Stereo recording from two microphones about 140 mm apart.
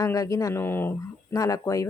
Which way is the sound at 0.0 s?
25° left (ahead or behind).